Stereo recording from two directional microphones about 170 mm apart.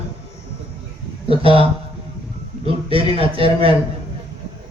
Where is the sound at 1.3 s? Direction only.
35° right (ahead or behind).